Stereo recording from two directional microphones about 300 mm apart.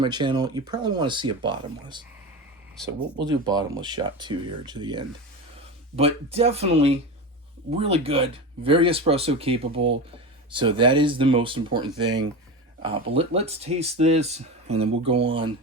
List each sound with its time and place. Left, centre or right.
0.0 s speech: centre
3.2 s speech: centre